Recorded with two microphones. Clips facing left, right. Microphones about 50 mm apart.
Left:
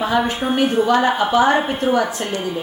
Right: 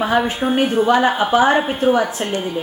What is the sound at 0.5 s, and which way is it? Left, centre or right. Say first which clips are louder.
Speech: even; right.